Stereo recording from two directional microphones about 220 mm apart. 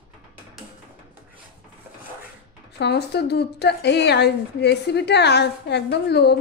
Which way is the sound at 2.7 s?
50° left (ahead or behind).